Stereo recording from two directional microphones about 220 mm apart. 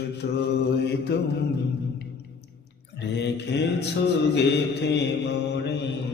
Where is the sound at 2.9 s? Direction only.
50° left (ahead or behind).